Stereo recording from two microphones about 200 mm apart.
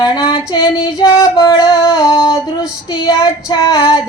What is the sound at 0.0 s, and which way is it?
Female singing, 20° left (ahead or behind).